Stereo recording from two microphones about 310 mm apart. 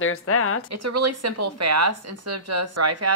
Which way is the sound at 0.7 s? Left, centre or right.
Right.